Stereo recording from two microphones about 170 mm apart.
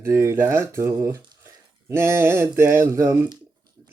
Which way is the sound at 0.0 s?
15° right (ahead or behind).